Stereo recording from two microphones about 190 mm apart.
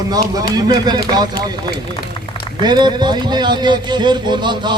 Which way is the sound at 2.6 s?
25° right (ahead or behind).